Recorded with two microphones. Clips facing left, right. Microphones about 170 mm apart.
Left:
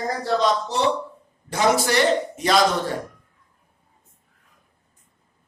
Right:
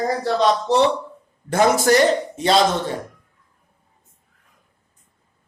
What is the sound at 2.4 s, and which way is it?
Speech, 30° right (ahead or behind).